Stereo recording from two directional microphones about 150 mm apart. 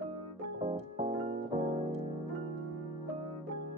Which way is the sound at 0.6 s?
45° right (ahead or behind).